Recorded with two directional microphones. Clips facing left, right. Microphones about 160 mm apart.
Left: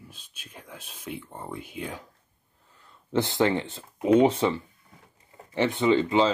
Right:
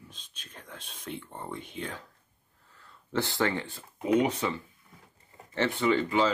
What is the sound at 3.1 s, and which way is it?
Speech, 20° left (ahead or behind).